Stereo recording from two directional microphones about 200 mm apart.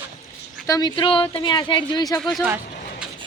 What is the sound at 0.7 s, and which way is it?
Speech, 20° left (ahead or behind).